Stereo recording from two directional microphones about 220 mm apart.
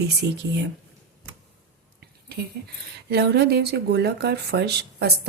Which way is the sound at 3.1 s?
45° right (ahead or behind).